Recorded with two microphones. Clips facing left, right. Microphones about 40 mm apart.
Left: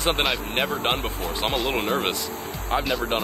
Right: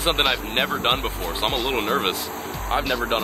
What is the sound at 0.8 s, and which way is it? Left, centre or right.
Speech, centre.